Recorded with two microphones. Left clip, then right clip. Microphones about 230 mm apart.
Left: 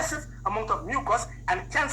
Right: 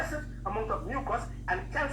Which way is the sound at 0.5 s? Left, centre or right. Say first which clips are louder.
Left 5 dB; left.